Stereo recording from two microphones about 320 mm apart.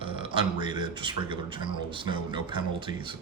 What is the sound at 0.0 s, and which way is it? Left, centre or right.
A man's voice, centre.